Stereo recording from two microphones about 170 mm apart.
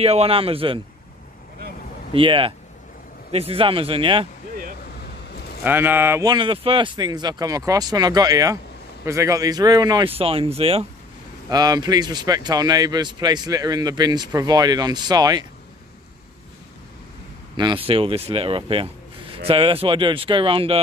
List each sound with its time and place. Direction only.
0.0 s speech: 35° right (ahead or behind)
2.1 s speech: 30° right (ahead or behind)
5.6 s speech: 10° right (ahead or behind)
6.3 s speech: 30° right (ahead or behind)
11.5 s speech: 25° right (ahead or behind)
17.6 s speech: 30° right (ahead or behind)